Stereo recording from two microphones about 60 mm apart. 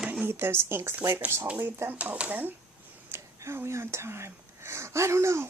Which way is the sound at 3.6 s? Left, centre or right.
Right.